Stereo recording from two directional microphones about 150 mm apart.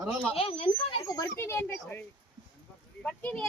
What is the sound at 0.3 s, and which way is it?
Speech, 40° left (ahead or behind).